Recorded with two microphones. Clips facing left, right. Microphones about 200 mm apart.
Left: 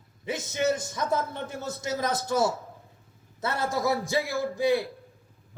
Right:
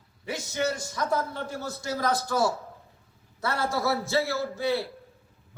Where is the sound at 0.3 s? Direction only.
20° left (ahead or behind).